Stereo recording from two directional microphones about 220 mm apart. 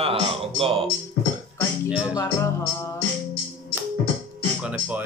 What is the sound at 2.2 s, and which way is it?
Music, 15° left (ahead or behind).